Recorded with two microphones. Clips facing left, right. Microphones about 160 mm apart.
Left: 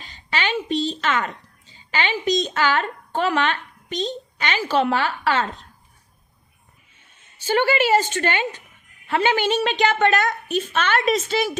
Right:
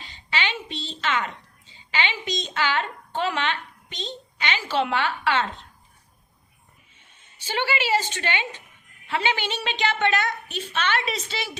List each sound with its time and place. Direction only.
0.0 s speech: 45° left (ahead or behind)
7.3 s a woman's voice: 45° left (ahead or behind)